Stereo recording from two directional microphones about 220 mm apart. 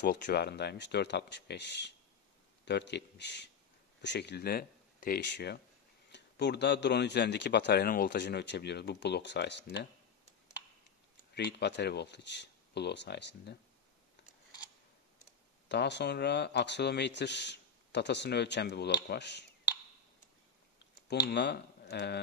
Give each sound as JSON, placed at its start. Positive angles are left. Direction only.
{"t": 0.0, "sound": "speech", "side_deg": 45}
{"t": 11.3, "sound": "speech", "side_deg": 50}
{"t": 15.7, "sound": "speech", "side_deg": 50}
{"t": 21.3, "sound": "speech", "side_deg": 50}